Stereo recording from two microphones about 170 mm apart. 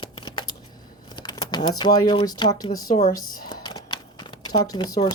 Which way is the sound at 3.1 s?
25° left (ahead or behind).